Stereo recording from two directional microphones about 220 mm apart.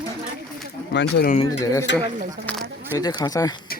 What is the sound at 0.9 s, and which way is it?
Speech, 50° left (ahead or behind).